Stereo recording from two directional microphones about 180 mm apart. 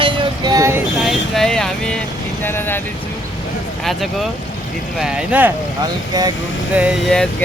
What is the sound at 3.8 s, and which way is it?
Speech, centre (ahead or behind).